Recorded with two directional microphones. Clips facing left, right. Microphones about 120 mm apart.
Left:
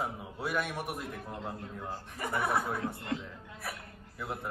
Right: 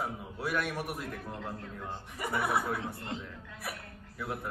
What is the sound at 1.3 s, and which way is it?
Speech, 15° left (ahead or behind).